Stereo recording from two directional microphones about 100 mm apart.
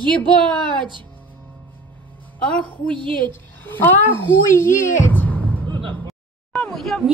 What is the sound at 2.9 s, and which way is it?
Speech, 55° right (ahead or behind).